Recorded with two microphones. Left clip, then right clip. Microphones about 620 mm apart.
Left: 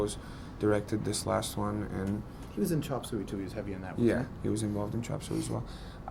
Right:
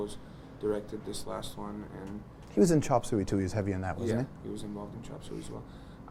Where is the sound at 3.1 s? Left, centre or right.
Right.